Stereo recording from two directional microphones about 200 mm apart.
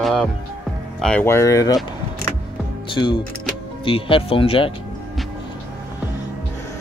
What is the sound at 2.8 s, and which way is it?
Speech, 25° left (ahead or behind).